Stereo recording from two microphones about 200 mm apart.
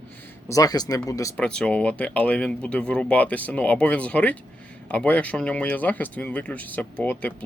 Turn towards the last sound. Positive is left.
turn(degrees=5)  # may be behind; listen again after turning